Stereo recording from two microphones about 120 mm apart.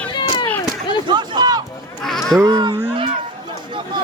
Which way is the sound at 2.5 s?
40° right (ahead or behind).